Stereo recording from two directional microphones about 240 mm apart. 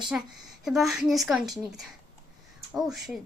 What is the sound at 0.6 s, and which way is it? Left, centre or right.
A woman's voice, centre.